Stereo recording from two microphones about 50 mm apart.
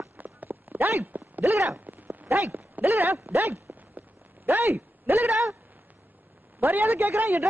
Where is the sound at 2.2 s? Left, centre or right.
Right.